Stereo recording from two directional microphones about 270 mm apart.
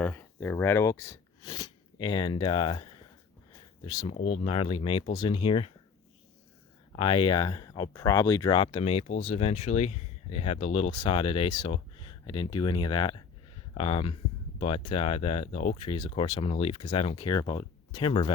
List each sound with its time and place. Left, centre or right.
0.0 s speech: centre
3.8 s speech: centre
6.9 s speech: centre